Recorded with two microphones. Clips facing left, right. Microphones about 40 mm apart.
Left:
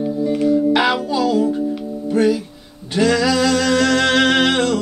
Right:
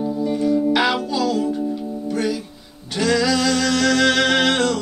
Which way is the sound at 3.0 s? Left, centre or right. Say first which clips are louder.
Left 3 dB; centre.